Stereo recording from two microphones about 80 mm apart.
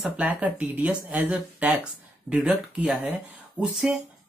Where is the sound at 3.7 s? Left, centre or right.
Centre.